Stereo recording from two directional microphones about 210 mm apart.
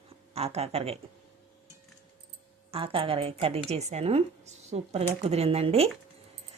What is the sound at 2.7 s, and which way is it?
A woman's voice, 25° right (ahead or behind).